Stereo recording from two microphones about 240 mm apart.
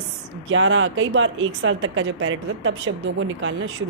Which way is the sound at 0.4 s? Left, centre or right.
Right.